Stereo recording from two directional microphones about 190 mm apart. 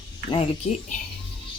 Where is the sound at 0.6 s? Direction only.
35° left (ahead or behind).